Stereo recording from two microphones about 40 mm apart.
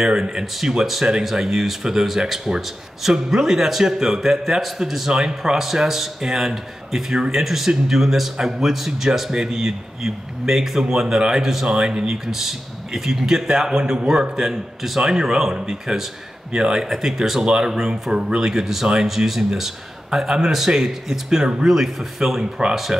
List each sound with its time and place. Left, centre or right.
0.0 s speech: centre
11.7 s speech: centre
18.5 s speech: centre